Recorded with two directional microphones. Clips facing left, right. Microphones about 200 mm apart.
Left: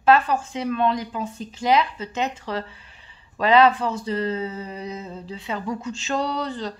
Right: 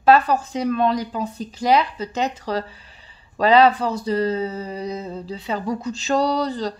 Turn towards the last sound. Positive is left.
turn(degrees=-35)  # may be behind; listen again after turning